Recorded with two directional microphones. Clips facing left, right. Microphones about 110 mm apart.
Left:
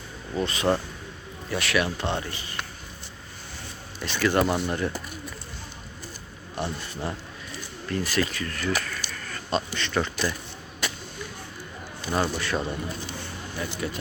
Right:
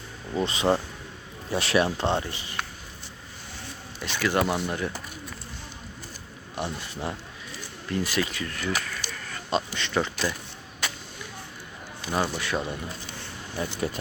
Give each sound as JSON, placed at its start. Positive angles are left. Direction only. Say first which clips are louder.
{"t": 0.3, "sound": "speech", "louder": "right 1 dB", "side_deg": -25}
{"t": 4.0, "sound": "speech", "louder": "left 2 dB", "side_deg": -10}
{"t": 6.6, "sound": "speech", "louder": "left 1 dB", "side_deg": -15}
{"t": 12.1, "sound": "speech", "louder": "left 1 dB", "side_deg": -5}
{"t": 13.6, "sound": "speech", "louder": "right 2 dB", "side_deg": -35}